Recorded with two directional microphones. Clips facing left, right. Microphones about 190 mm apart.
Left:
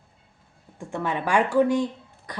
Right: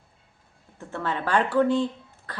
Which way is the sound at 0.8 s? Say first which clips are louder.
Left 2 dB; 15° left (ahead or behind).